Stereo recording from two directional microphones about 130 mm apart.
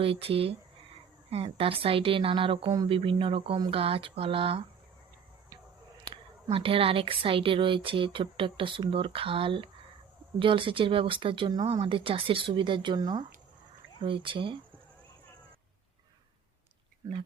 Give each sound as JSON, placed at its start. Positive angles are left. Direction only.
{"t": 0.0, "sound": "a woman's voice", "side_deg": -45}
{"t": 6.5, "sound": "a woman's voice", "side_deg": -45}